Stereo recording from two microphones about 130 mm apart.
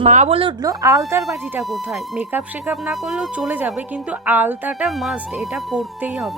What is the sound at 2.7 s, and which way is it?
Speech, centre (ahead or behind).